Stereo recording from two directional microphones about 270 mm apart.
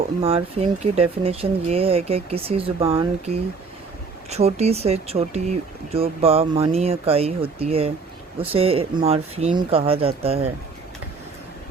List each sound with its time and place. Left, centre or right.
0.2 s speech: right